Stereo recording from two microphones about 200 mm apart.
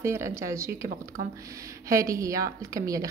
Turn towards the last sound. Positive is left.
turn(degrees=-15)  # may be behind; listen again after turning